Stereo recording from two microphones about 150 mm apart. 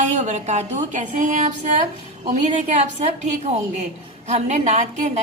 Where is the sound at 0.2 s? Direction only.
50° right (ahead or behind).